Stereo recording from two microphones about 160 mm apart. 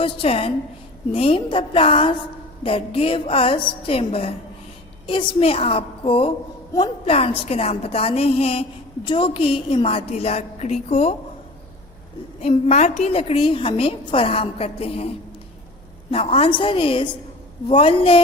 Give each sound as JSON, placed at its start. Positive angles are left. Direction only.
{"t": 0.0, "sound": "a woman's voice", "side_deg": 35}
{"t": 12.4, "sound": "a woman's voice", "side_deg": 40}
{"t": 16.1, "sound": "a woman's voice", "side_deg": 40}